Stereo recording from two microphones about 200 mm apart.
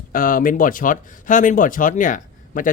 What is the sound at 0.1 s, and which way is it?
Speech, 45° left (ahead or behind).